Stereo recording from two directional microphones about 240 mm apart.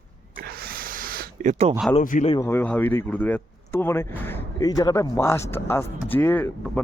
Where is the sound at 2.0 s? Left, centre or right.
Left.